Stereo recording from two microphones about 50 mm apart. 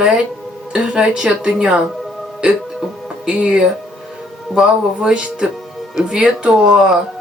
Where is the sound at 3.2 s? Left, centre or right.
Right.